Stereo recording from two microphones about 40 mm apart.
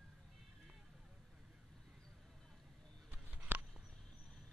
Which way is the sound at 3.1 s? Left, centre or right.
Right.